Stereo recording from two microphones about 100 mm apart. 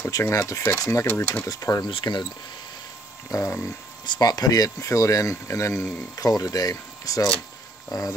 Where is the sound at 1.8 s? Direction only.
50° left (ahead or behind).